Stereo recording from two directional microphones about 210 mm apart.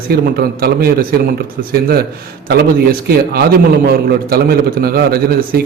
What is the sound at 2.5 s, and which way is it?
A man's voice, 45° right (ahead or behind).